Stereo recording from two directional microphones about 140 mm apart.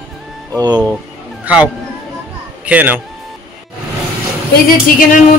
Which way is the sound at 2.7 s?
10° right (ahead or behind).